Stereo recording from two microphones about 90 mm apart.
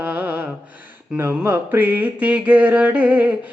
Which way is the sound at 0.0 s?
20° right (ahead or behind).